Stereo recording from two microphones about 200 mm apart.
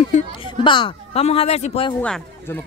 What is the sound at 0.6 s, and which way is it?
Speech, 25° left (ahead or behind).